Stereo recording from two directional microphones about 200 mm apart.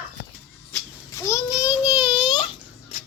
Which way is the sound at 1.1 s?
15° left (ahead or behind).